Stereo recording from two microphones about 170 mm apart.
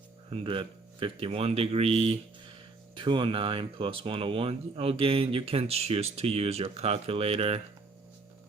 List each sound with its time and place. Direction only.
0.3 s speech: 35° right (ahead or behind)